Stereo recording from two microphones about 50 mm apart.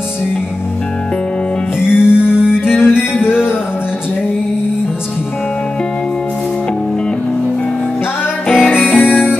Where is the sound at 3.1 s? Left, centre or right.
Left.